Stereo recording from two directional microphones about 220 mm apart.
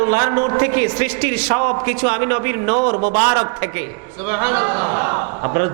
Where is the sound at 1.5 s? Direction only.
25° right (ahead or behind).